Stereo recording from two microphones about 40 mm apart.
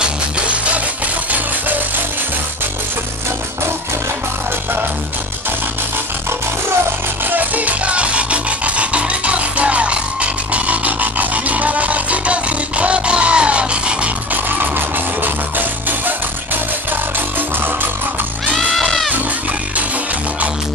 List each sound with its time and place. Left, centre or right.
7.2 s music: right
18.5 s music: centre